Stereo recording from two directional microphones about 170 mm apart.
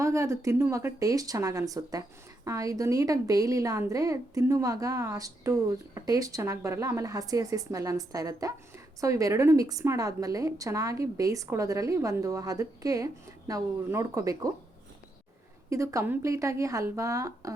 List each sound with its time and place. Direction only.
0.0 s speech: 20° right (ahead or behind)
15.7 s speech: 20° right (ahead or behind)